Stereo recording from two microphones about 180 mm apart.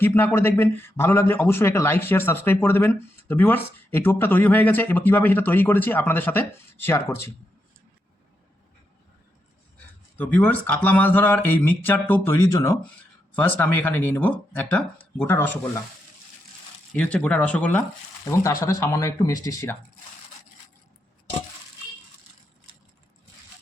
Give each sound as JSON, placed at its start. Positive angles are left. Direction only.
{"t": 0.0, "sound": "speech", "side_deg": 10}
{"t": 10.2, "sound": "speech", "side_deg": 10}
{"t": 16.9, "sound": "speech", "side_deg": 5}